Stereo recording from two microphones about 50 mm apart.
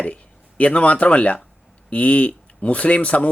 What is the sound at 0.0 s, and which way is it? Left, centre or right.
Speech, left.